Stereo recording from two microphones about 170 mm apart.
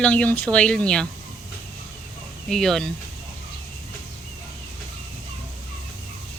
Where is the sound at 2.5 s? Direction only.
Centre (ahead or behind).